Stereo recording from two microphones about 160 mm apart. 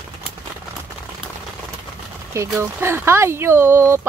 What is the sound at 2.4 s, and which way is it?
Speech, 15° right (ahead or behind).